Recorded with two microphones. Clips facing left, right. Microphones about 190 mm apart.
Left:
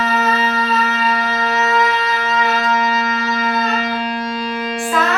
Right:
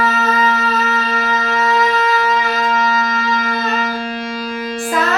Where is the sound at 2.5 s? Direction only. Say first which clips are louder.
Even; 60° left (ahead or behind).